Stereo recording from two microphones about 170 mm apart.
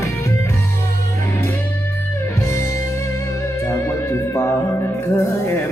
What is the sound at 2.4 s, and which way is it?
Music, 15° left (ahead or behind).